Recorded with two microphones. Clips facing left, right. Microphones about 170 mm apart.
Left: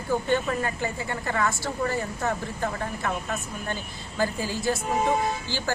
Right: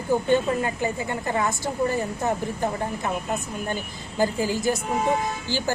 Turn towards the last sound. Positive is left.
turn(degrees=-15)  # may be behind; listen again after turning